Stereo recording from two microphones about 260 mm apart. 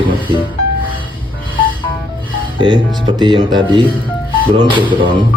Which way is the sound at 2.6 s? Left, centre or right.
Centre.